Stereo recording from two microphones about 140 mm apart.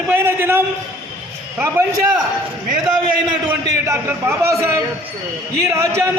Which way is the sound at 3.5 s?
20° right (ahead or behind).